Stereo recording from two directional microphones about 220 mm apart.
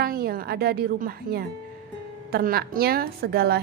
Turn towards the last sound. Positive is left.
turn(degrees=-45)  # may be behind; listen again after turning